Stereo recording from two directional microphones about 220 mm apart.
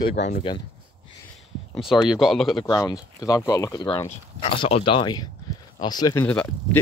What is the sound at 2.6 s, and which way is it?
Speech, 20° left (ahead or behind).